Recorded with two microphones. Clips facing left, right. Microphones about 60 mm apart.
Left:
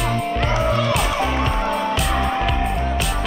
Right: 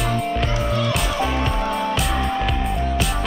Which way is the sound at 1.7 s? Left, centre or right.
Centre.